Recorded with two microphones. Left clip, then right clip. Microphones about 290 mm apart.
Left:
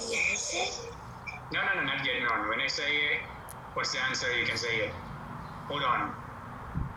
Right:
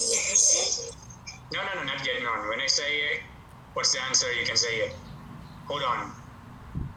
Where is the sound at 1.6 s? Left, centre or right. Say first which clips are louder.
Left 1 dB; centre.